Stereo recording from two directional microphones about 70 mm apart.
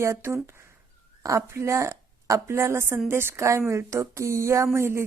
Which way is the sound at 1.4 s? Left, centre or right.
Right.